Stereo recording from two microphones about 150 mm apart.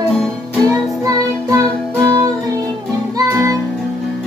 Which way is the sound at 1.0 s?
25° right (ahead or behind).